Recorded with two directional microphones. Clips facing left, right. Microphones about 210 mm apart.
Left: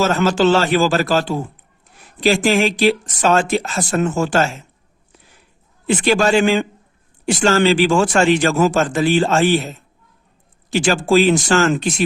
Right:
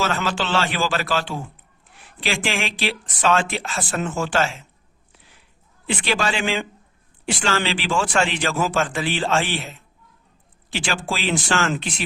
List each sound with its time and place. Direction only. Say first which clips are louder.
0.0 s a man's voice: left 9 dB; 40° left (ahead or behind)
5.9 s speech: left 9 dB; 45° left (ahead or behind)